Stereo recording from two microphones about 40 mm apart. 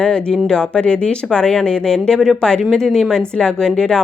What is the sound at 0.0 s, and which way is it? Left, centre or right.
Speech, centre.